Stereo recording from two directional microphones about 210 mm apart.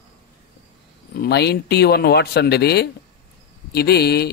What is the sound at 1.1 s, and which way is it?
Speech, 50° left (ahead or behind).